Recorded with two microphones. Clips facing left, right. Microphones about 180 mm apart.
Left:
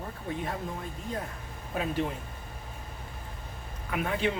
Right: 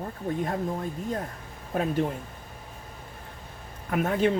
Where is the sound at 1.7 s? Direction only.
45° right (ahead or behind).